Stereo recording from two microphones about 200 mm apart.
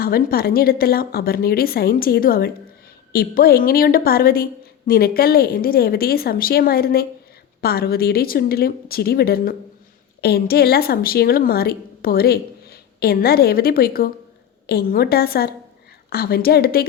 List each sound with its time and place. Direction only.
0.0 s a woman's voice: 50° left (ahead or behind)